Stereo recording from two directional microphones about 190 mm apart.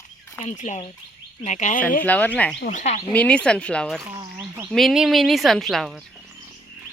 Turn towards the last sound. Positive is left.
turn(degrees=0)  # may be behind; listen again after turning